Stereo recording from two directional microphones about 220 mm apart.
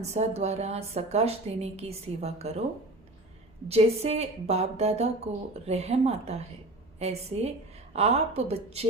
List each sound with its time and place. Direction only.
0.0 s a woman's voice: 30° right (ahead or behind)
3.7 s a woman's voice: 30° right (ahead or behind)